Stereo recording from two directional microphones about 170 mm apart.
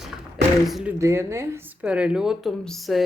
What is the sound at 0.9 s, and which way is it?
Speech, 15° right (ahead or behind).